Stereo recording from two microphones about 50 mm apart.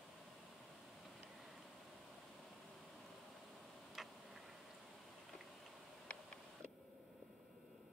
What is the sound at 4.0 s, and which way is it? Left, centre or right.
Tick-tock, centre.